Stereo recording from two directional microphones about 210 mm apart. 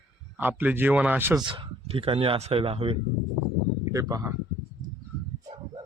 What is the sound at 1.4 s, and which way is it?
Speech, 25° right (ahead or behind).